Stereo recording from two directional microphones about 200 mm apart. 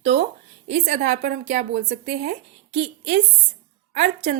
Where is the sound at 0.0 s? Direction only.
55° right (ahead or behind).